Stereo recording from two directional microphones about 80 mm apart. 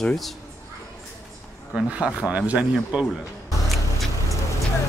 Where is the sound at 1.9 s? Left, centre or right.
Centre.